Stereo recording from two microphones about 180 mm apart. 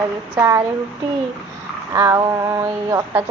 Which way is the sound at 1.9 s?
15° right (ahead or behind).